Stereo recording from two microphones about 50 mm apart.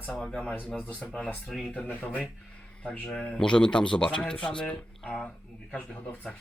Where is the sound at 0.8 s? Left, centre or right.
Left.